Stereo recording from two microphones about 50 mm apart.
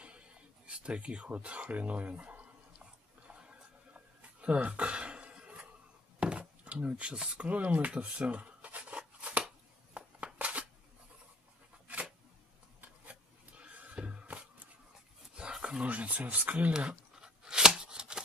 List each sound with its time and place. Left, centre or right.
0.7 s speech: right
3.3 s a sound: centre
12.8 s a sound: right
15.3 s dog: centre
15.8 s speech: right
16.7 s chopping: centre